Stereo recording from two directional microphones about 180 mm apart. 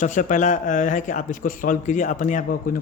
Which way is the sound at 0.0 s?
45° left (ahead or behind).